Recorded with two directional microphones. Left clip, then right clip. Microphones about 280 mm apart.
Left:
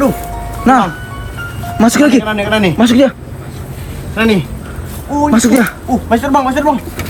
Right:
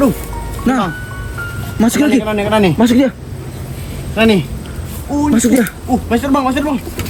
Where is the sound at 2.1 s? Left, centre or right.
Centre.